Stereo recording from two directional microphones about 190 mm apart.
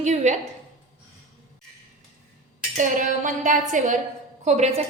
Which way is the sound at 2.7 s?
45° right (ahead or behind).